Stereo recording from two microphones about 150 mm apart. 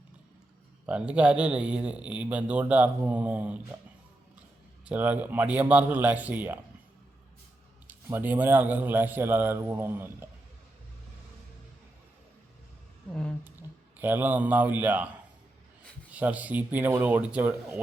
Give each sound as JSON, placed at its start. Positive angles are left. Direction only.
{"t": 0.9, "sound": "speech", "side_deg": -10}
{"t": 4.9, "sound": "speech", "side_deg": -10}
{"t": 7.9, "sound": "speech", "side_deg": -15}
{"t": 14.0, "sound": "speech", "side_deg": -10}
{"t": 16.1, "sound": "speech", "side_deg": -10}